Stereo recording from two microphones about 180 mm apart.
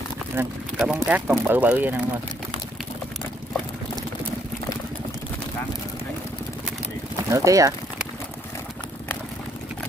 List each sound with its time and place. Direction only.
0.4 s speech: 10° right (ahead or behind)
7.2 s speech: 20° right (ahead or behind)